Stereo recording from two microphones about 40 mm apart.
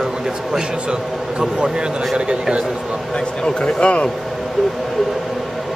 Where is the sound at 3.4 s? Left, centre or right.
Left.